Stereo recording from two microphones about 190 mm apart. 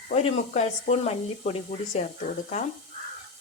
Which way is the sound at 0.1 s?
35° left (ahead or behind).